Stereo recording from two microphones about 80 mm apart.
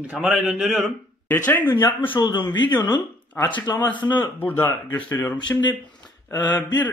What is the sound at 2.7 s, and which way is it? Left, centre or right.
Speech, left.